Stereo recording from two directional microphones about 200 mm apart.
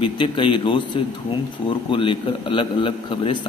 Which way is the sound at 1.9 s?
25° left (ahead or behind).